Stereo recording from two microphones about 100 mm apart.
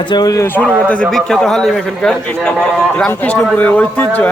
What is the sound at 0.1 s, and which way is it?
Speech, 40° left (ahead or behind).